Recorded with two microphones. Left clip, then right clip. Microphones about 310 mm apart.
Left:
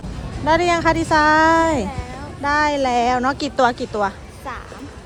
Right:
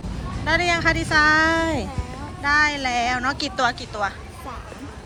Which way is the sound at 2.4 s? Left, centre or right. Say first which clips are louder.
Left 2 dB; left.